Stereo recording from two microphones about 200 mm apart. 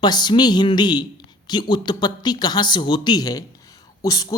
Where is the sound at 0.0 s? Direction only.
20° left (ahead or behind).